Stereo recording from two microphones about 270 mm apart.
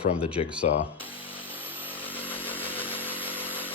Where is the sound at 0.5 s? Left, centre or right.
Centre.